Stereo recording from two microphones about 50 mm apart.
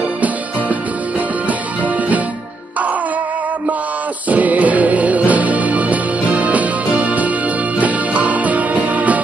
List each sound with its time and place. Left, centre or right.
4.3 s music: right